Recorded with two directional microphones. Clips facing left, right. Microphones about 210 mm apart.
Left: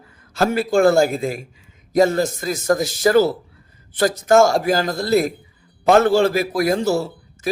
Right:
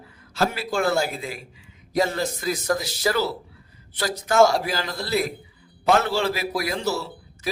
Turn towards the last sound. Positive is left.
turn(degrees=50)  # may be behind; listen again after turning